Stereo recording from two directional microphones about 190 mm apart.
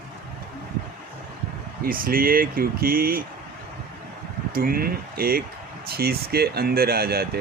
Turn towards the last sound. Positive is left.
turn(degrees=-55)  # may be behind; listen again after turning